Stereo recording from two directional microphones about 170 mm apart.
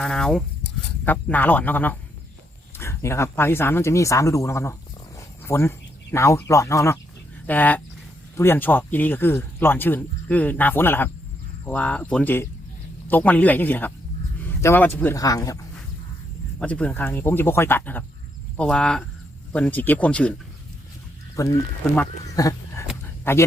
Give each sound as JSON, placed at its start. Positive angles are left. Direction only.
{"t": 0.0, "sound": "speech", "side_deg": 5}
{"t": 16.6, "sound": "speech", "side_deg": 10}
{"t": 21.3, "sound": "speech", "side_deg": 20}